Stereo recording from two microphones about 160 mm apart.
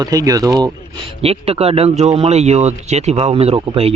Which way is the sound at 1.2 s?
40° right (ahead or behind).